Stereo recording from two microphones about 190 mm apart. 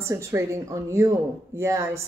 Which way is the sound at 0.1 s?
15° right (ahead or behind).